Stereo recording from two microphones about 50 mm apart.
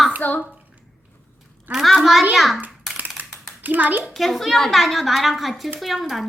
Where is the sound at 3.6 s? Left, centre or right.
Right.